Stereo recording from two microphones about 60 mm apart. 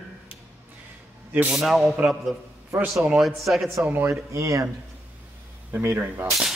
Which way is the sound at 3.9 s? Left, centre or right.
Right.